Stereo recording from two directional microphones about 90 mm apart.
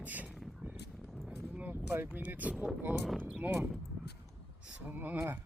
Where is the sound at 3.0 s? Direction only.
5° left (ahead or behind).